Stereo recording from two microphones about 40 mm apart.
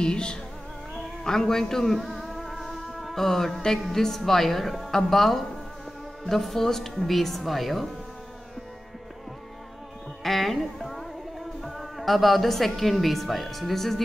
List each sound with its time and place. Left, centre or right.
0.0 s music: left
1.2 s a woman's voice: centre
10.2 s music: centre
11.6 s a woman's voice: centre